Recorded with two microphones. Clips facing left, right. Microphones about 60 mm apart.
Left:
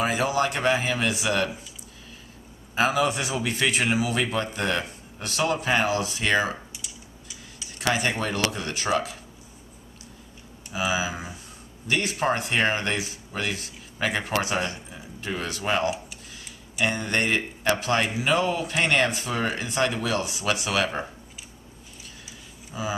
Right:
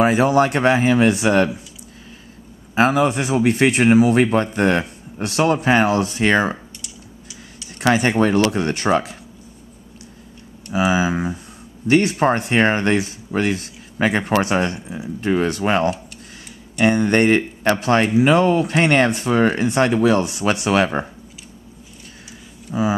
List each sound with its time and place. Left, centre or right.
0.0 s speech: right
2.7 s a man's voice: right
6.8 s a sound: centre
7.8 s speech: right
10.7 s speech: right
12.2 s speech: right
22.7 s speech: right